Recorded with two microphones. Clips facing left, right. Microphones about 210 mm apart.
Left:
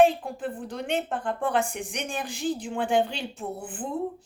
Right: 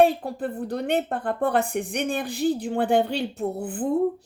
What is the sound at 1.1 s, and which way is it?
A woman's voice, 60° right (ahead or behind).